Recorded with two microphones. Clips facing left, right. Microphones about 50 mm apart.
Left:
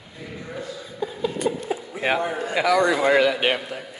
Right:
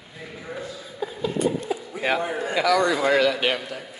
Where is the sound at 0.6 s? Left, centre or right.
Centre.